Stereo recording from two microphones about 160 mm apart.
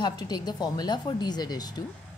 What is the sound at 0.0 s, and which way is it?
A woman's voice, 25° left (ahead or behind).